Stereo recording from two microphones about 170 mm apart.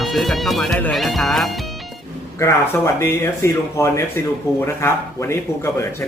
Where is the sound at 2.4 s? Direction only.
15° left (ahead or behind).